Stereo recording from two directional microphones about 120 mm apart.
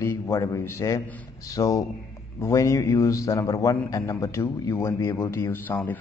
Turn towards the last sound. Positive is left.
turn(degrees=15)  # may be behind; listen again after turning